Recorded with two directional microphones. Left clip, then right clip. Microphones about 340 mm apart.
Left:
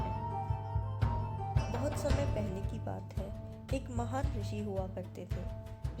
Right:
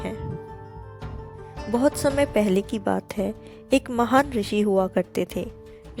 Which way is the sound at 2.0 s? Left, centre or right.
Right.